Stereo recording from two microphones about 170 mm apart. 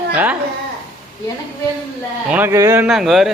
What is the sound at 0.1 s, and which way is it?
Speech, 10° right (ahead or behind).